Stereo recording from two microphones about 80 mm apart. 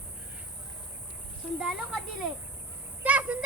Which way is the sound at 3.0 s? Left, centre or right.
Centre.